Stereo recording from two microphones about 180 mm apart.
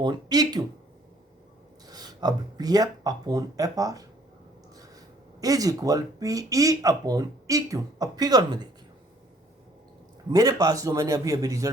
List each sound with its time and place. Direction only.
0.0 s speech: 25° right (ahead or behind)
1.9 s speech: 20° right (ahead or behind)
5.4 s speech: 20° right (ahead or behind)
10.3 s speech: 20° right (ahead or behind)